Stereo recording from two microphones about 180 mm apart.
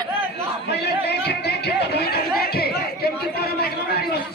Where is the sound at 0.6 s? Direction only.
65° left (ahead or behind).